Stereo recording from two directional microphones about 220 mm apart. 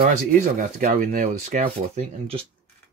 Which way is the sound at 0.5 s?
35° right (ahead or behind).